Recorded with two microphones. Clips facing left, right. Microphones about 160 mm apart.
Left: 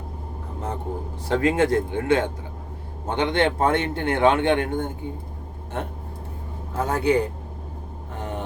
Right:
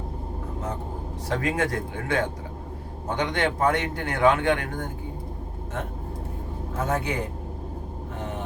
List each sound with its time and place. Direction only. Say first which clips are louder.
1.3 s speech: left 6 dB; 25° left (ahead or behind)
6.7 s a man's voice: left 6 dB; 35° left (ahead or behind)